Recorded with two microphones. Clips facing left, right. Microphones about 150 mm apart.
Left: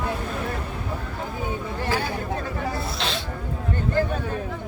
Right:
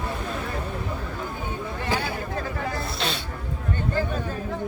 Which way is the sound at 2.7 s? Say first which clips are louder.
Even; centre (ahead or behind).